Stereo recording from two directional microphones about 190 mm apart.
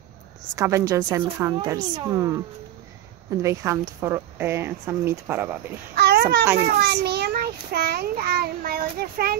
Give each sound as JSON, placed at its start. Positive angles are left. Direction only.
{"t": 0.6, "sound": "speech", "side_deg": -15}
{"t": 3.4, "sound": "speech", "side_deg": -15}
{"t": 5.9, "sound": "babbling", "side_deg": -60}
{"t": 6.6, "sound": "a child's voice", "side_deg": -60}